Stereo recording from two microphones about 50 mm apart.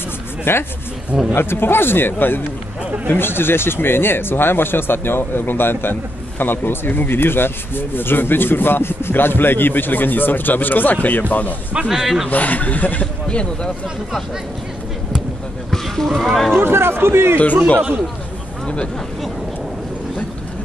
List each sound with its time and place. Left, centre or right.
0.5 s speech: left
11.9 s a man's voice: centre
12.3 s a man's voice: left
15.7 s speech: centre
16.5 s speech: right